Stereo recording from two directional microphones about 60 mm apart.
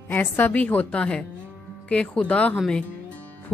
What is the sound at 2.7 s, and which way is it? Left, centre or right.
Music, left.